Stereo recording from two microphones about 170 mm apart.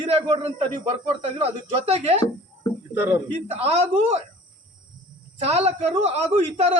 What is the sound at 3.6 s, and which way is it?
Speech, 35° right (ahead or behind).